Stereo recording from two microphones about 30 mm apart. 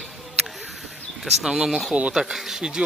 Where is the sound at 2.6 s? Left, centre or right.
Right.